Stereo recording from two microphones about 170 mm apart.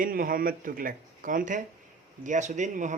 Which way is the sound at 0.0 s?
55° right (ahead or behind).